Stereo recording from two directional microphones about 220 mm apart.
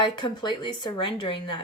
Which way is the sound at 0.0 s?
20° left (ahead or behind).